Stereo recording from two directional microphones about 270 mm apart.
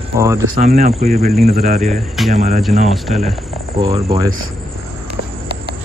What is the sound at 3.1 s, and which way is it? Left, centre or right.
Speech, right.